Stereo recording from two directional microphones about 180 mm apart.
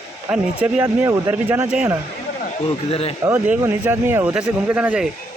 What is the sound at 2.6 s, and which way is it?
Speech, 35° left (ahead or behind).